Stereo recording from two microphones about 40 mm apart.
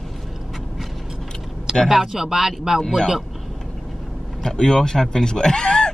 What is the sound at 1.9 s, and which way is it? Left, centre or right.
Speech, centre.